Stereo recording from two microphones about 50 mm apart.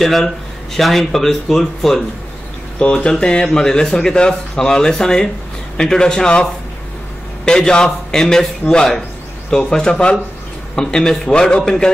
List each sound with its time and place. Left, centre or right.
0.0 s speech: centre
2.8 s a man's voice: left
9.5 s a man's voice: centre